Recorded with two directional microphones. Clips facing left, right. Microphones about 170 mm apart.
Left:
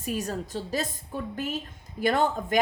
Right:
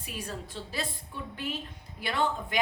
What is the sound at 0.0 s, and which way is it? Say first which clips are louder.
A woman's voice: left 8 dB; 45° left (ahead or behind).